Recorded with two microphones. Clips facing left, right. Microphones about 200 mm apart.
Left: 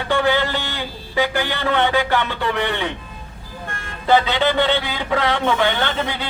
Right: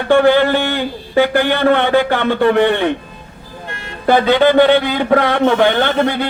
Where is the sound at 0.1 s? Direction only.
55° right (ahead or behind).